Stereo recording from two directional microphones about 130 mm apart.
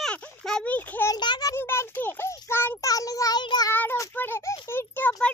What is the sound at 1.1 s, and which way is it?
Speech, 30° left (ahead or behind).